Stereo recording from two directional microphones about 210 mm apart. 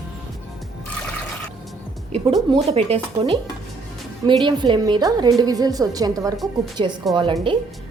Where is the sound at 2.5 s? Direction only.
25° right (ahead or behind).